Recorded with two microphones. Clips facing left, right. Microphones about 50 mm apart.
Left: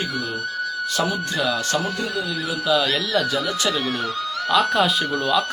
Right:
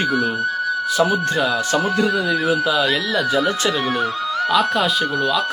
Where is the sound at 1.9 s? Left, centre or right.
Right.